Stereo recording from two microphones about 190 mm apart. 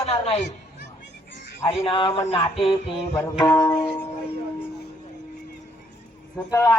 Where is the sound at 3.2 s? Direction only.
20° left (ahead or behind).